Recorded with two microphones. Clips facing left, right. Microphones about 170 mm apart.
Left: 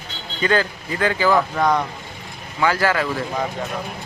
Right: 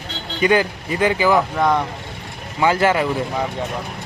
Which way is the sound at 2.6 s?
20° right (ahead or behind).